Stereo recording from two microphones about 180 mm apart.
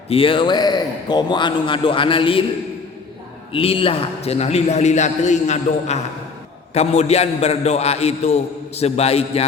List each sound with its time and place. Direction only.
0.1 s a man's voice: 30° left (ahead or behind)
3.5 s a man's voice: 30° left (ahead or behind)